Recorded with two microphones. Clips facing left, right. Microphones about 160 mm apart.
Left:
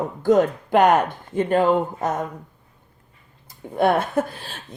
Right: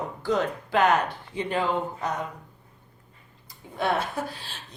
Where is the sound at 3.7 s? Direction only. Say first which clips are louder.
Left 8 dB; 50° left (ahead or behind).